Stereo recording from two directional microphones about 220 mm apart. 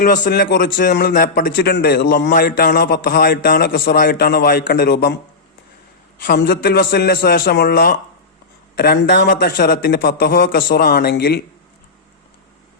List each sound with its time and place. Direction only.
0.2 s a man's voice: 50° left (ahead or behind)
6.2 s a man's voice: 50° left (ahead or behind)